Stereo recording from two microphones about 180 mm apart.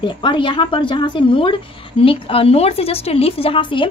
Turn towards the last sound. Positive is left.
turn(degrees=30)  # may be behind; listen again after turning